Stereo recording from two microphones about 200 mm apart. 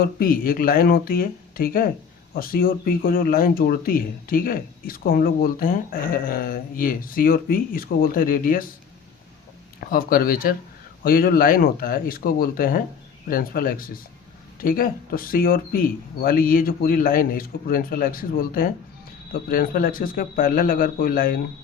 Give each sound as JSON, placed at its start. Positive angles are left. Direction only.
{"t": 0.0, "sound": "speech", "side_deg": 45}
{"t": 9.9, "sound": "speech", "side_deg": 45}